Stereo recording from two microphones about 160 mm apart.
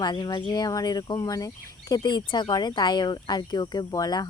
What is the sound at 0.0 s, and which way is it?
Speech, 30° left (ahead or behind).